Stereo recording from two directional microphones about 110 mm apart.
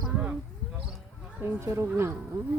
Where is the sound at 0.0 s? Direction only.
10° right (ahead or behind).